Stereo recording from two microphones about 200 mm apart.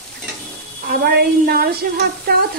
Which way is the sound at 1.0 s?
50° right (ahead or behind).